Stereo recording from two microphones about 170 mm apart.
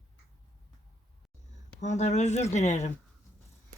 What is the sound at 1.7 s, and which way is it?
Speech, 45° left (ahead or behind).